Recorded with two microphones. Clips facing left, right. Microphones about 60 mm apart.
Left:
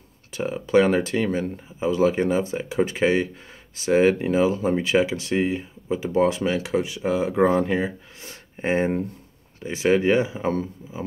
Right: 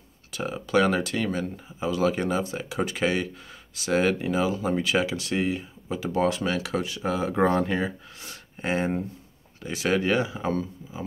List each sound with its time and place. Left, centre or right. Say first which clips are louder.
0.3 s speech: left 4 dB; left
8.2 s speech: left 5 dB; left